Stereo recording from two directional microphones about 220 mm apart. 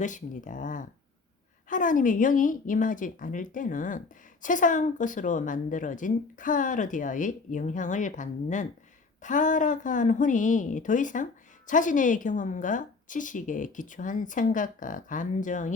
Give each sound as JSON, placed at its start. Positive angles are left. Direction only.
{"t": 0.0, "sound": "a woman's voice", "side_deg": 35}